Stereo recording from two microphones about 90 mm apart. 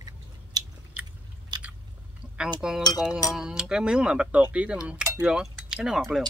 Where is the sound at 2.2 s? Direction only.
10° right (ahead or behind).